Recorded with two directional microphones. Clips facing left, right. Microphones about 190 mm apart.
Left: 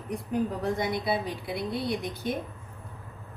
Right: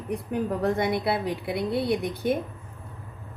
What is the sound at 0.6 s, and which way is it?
A woman's voice, 60° right (ahead or behind).